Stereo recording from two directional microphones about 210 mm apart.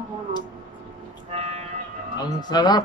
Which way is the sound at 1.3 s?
30° right (ahead or behind).